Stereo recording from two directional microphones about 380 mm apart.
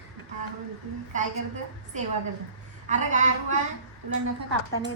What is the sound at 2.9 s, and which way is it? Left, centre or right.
Speech, centre.